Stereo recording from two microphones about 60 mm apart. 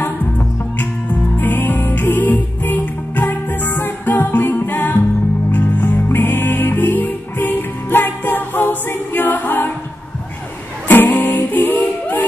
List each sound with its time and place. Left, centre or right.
0.0 s music: left
10.9 s music: left